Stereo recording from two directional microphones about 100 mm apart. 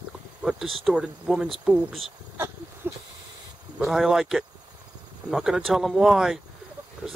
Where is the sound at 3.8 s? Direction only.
Centre (ahead or behind).